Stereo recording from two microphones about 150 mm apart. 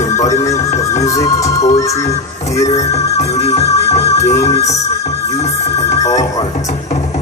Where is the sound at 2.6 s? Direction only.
45° left (ahead or behind).